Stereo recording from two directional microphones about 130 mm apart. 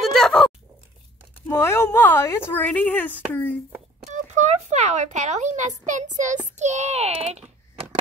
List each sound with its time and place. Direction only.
0.0 s a sound: 5° left (ahead or behind)
1.5 s speech: 20° left (ahead or behind)
4.1 s a child's voice: 65° right (ahead or behind)